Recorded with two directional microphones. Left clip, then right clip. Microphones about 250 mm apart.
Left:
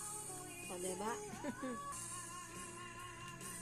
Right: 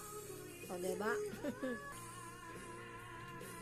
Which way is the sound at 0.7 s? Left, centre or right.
Centre.